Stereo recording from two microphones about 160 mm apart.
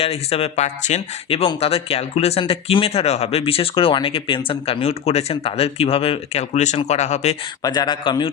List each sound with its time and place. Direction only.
0.0 s speech: 40° left (ahead or behind)
7.6 s speech: 25° left (ahead or behind)